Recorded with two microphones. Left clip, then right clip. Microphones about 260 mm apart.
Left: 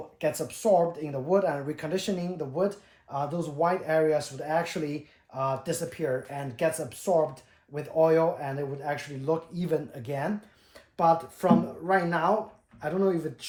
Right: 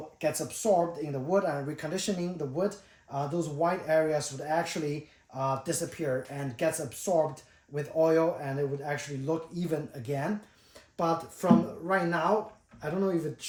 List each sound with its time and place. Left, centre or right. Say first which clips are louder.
0.2 s speech: left 2 dB; centre